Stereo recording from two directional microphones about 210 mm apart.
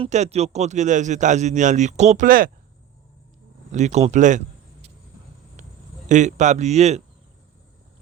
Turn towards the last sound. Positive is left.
turn(degrees=-30)  # may be behind; listen again after turning